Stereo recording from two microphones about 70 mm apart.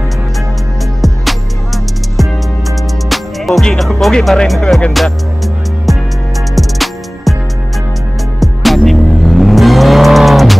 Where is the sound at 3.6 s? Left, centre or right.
Centre.